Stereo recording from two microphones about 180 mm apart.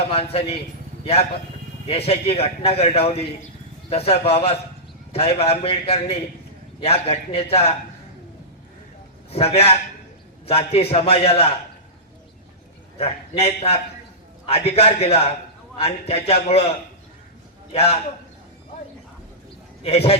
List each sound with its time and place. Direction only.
0.0 s a man's voice: 35° left (ahead or behind)
9.3 s a man's voice: 35° left (ahead or behind)
13.0 s a man's voice: 35° left (ahead or behind)
17.7 s a man's voice: 35° left (ahead or behind)
19.8 s a man's voice: 35° left (ahead or behind)